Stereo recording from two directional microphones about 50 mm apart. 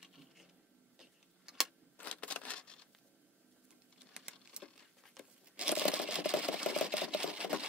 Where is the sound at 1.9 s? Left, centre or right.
Left.